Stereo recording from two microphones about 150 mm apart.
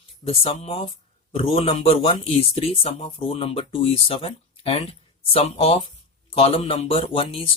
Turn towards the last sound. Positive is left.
turn(degrees=40)  # may be behind; listen again after turning